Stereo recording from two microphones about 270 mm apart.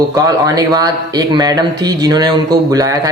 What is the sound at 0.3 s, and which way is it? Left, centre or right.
Speech, centre.